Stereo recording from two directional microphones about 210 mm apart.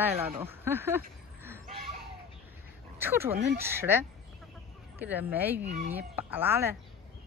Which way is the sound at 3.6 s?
10° right (ahead or behind).